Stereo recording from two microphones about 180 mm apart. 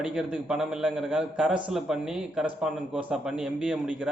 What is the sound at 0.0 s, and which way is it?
Speech, 5° right (ahead or behind).